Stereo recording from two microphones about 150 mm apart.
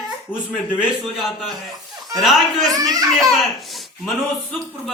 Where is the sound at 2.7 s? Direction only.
25° right (ahead or behind).